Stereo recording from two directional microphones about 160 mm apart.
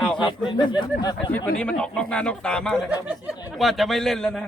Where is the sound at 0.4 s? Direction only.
30° left (ahead or behind).